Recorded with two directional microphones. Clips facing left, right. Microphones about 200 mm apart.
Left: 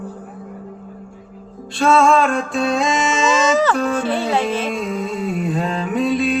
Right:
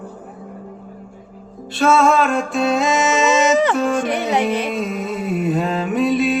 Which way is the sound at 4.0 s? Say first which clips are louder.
Even; 15° right (ahead or behind).